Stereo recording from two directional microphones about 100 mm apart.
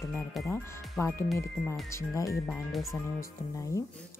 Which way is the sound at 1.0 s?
25° left (ahead or behind).